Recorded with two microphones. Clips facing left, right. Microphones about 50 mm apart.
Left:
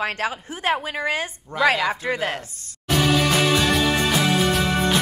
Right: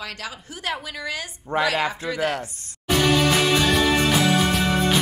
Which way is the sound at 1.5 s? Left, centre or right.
Right.